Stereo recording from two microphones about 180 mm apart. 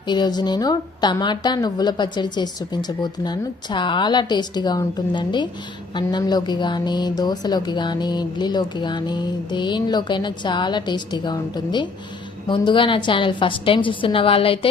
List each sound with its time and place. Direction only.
0.0 s a woman's voice: 25° left (ahead or behind)